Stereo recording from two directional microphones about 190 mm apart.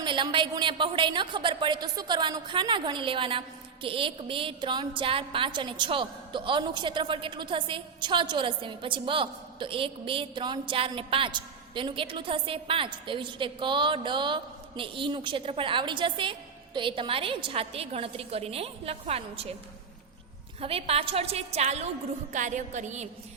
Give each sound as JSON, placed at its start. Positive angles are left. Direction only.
{"t": 0.0, "sound": "a woman's voice", "side_deg": -25}
{"t": 20.6, "sound": "a woman's voice", "side_deg": -30}